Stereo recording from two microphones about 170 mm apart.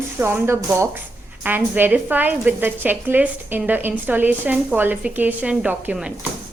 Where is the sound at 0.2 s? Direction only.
15° right (ahead or behind).